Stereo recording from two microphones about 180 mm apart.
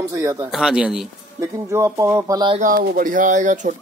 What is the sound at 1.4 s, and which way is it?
Speech, 15° right (ahead or behind).